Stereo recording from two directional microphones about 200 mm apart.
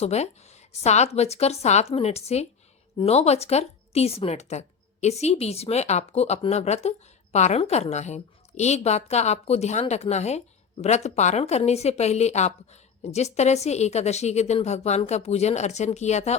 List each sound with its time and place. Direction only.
0.0 s a woman's voice: 35° left (ahead or behind)